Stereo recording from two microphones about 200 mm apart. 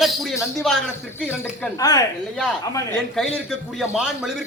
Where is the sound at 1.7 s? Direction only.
20° left (ahead or behind).